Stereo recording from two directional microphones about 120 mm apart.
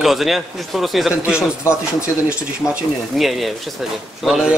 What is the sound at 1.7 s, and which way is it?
Speech, 20° left (ahead or behind).